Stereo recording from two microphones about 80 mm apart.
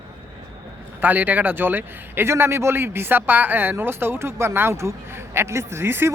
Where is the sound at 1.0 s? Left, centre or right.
Right.